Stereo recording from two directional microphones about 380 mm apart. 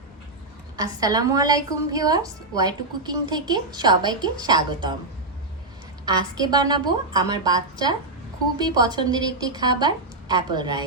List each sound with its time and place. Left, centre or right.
0.8 s a woman's voice: centre
6.1 s a woman's voice: centre